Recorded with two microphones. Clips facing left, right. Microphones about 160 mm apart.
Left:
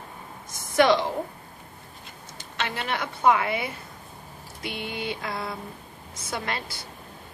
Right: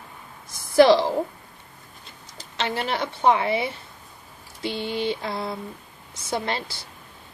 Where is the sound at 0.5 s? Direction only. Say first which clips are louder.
Right 5 dB; 35° right (ahead or behind).